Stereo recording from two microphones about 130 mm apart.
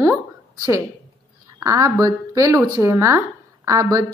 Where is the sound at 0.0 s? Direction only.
20° right (ahead or behind).